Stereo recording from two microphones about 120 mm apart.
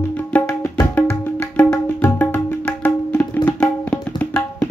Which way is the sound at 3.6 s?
10° left (ahead or behind).